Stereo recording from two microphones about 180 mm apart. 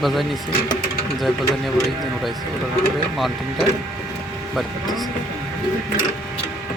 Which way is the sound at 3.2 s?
Centre (ahead or behind).